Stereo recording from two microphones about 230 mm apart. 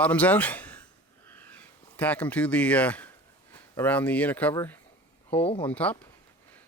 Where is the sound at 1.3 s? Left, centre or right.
Centre.